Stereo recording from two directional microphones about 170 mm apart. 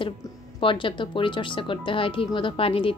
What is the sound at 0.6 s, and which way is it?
A woman's voice, 30° left (ahead or behind).